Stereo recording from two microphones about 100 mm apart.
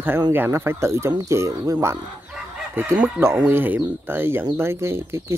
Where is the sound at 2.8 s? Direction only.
25° right (ahead or behind).